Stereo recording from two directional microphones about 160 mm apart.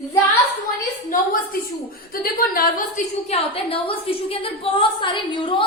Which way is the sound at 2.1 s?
70° left (ahead or behind).